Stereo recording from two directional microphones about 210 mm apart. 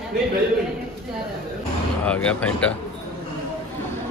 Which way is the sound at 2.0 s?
5° left (ahead or behind).